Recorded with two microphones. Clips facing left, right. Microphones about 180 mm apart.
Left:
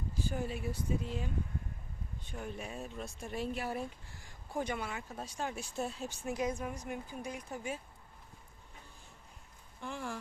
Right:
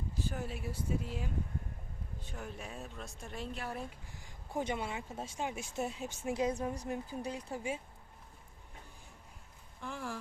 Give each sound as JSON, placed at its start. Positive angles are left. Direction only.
{"t": 0.2, "sound": "speech", "side_deg": 0}
{"t": 4.1, "sound": "speech", "side_deg": -20}
{"t": 9.8, "sound": "speech", "side_deg": 0}